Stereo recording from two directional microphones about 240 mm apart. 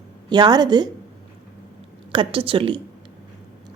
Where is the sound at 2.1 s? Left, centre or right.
Right.